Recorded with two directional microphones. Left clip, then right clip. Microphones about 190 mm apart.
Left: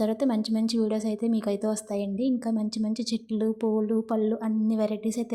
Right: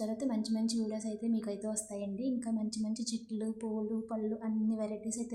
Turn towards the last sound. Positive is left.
turn(degrees=35)  # may be behind; listen again after turning